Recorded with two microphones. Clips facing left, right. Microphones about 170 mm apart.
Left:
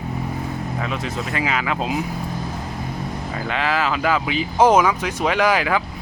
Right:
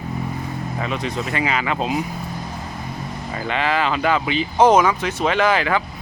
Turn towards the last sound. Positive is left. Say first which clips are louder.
# even
turn(degrees=10)  # may be behind; listen again after turning